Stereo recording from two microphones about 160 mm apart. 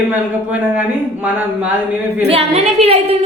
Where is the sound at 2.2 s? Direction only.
40° right (ahead or behind).